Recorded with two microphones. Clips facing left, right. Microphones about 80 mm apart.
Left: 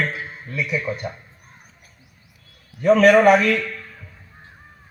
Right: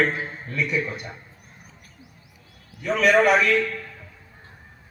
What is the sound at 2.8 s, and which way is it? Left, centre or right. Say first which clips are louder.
Speech: left 6 dB; left.